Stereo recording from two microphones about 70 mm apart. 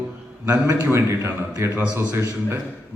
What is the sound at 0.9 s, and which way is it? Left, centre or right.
A man's voice, right.